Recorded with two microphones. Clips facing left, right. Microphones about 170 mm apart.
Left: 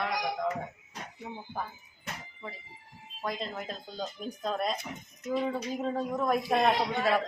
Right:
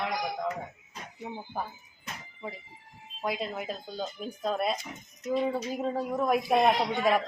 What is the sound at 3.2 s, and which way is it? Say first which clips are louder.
A man's voice: right 3 dB; 10° right (ahead or behind).